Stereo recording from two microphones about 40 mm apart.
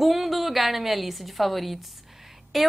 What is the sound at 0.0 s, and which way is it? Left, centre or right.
A woman's voice, centre.